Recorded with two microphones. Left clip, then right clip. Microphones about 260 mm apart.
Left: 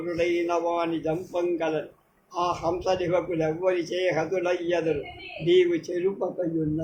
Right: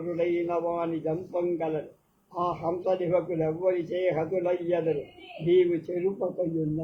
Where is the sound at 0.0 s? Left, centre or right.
Left.